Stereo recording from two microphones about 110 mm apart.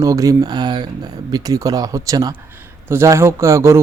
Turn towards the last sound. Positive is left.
turn(degrees=-25)  # may be behind; listen again after turning